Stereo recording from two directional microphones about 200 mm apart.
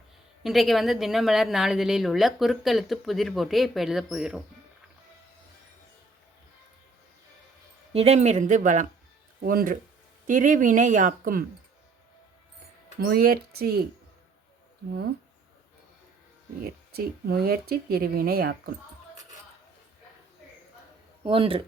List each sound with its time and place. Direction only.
0.4 s a woman's voice: centre (ahead or behind)
7.9 s speech: 35° right (ahead or behind)
13.0 s speech: 50° right (ahead or behind)
16.6 s speech: 50° right (ahead or behind)
21.2 s speech: 25° right (ahead or behind)